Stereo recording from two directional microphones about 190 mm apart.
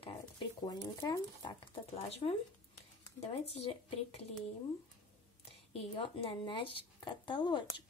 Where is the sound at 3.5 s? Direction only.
35° left (ahead or behind).